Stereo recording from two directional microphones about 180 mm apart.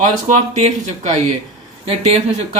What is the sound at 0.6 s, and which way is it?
Speech, 40° right (ahead or behind).